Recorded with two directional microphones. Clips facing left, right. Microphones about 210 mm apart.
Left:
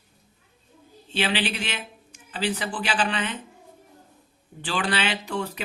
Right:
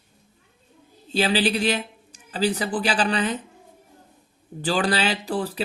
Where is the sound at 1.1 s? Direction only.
40° right (ahead or behind).